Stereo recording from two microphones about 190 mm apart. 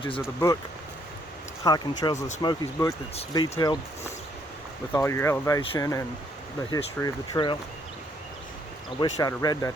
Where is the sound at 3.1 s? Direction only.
30° left (ahead or behind).